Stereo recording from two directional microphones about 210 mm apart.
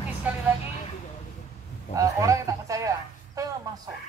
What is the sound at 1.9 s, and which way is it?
Speech, 15° right (ahead or behind).